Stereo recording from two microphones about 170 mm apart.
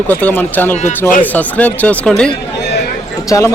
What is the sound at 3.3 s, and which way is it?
Speech, 20° left (ahead or behind).